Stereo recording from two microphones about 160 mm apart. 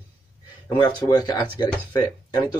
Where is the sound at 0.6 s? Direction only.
25° left (ahead or behind).